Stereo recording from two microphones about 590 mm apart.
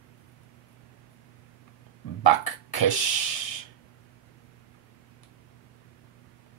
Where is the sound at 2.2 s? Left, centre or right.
Left.